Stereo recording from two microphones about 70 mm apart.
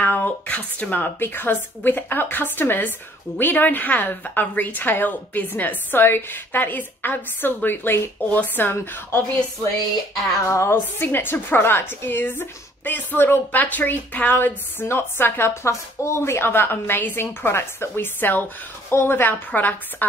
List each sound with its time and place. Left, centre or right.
0.0 s a woman's voice: left
10.3 s speech: left
10.7 s a woman's voice: left